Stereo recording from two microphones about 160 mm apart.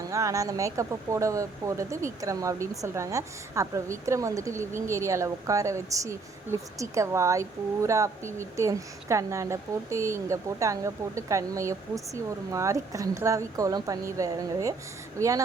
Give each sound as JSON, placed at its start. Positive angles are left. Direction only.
{"t": 0.0, "sound": "a woman's voice", "side_deg": -20}